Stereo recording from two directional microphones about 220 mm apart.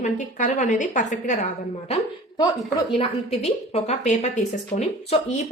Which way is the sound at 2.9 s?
25° left (ahead or behind).